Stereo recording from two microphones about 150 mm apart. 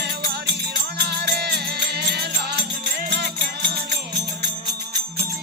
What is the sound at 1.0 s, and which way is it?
Music, 90° right.